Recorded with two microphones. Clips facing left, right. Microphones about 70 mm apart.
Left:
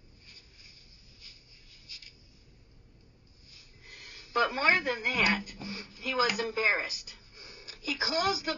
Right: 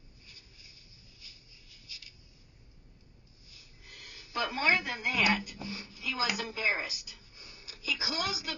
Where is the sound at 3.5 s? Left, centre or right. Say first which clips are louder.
Left 1 dB; left.